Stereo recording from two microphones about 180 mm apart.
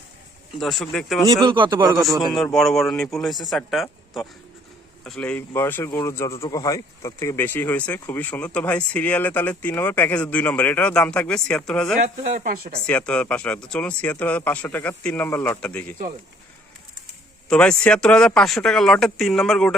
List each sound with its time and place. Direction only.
0.6 s speech: centre (ahead or behind)
1.5 s speech: 25° right (ahead or behind)
2.0 s speech: centre (ahead or behind)
12.0 s speech: 50° right (ahead or behind)
12.8 s speech: 5° left (ahead or behind)
17.5 s speech: 5° left (ahead or behind)